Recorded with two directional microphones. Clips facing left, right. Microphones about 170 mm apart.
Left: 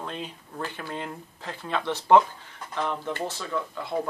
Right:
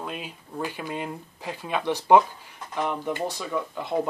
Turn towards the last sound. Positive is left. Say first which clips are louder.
# right 2 dB
turn(degrees=-15)  # may be behind; listen again after turning